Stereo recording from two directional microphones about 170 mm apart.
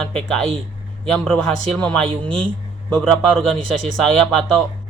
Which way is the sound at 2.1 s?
30° right (ahead or behind).